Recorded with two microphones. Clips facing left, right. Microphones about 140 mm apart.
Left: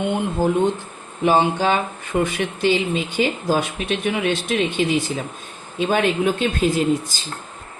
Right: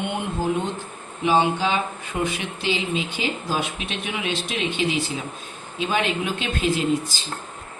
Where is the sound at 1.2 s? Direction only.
50° left (ahead or behind).